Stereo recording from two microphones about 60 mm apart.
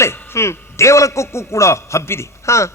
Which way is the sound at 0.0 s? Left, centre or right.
Left.